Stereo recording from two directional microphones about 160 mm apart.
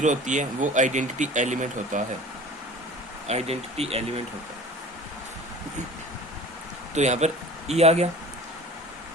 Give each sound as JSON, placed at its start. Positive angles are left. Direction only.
{"t": 0.0, "sound": "speech", "side_deg": -50}
{"t": 3.2, "sound": "speech", "side_deg": -40}
{"t": 6.9, "sound": "speech", "side_deg": -45}